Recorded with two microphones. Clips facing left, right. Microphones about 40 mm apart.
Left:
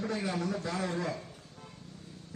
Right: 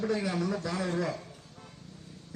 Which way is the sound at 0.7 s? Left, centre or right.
Right.